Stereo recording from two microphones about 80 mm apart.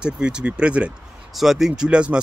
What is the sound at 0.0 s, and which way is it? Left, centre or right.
Speech, centre.